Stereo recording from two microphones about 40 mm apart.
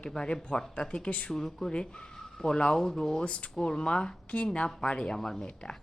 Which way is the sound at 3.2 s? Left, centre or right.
Left.